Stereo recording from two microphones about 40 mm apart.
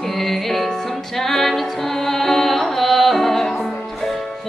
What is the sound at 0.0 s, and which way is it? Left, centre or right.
Music, centre.